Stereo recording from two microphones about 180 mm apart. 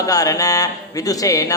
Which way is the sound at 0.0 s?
20° left (ahead or behind).